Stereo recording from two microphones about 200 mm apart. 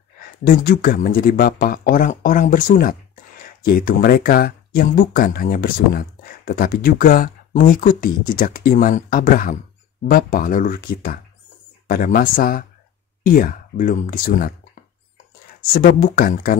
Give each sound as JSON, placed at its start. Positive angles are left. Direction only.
{"t": 0.2, "sound": "speech", "side_deg": 45}
{"t": 15.6, "sound": "speech", "side_deg": 45}